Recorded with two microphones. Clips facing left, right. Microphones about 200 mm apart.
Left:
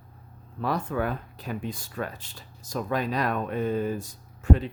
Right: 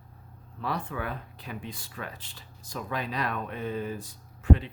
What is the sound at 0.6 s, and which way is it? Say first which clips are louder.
Speech: left 5 dB; 45° left (ahead or behind).